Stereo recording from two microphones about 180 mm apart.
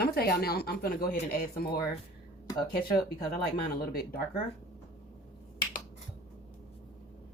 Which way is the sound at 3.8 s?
55° left (ahead or behind).